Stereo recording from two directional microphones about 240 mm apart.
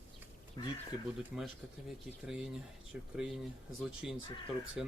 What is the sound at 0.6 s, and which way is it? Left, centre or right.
Speech, centre.